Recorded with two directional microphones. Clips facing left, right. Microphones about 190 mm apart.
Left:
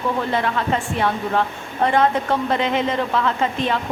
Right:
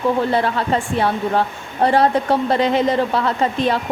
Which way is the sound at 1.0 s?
35° right (ahead or behind).